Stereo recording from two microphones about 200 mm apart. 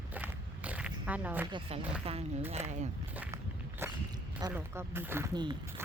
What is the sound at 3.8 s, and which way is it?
Walk, 15° right (ahead or behind).